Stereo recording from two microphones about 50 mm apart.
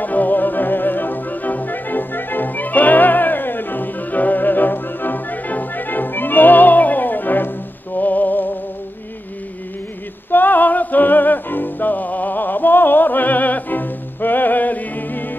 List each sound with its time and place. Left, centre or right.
0.0 s music: left
10.3 s music: left